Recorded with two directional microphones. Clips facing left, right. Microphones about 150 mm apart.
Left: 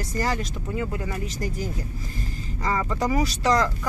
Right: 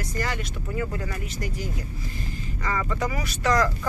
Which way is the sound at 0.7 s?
20° left (ahead or behind).